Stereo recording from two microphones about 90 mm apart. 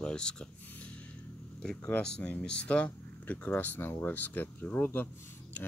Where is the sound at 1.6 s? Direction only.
15° left (ahead or behind).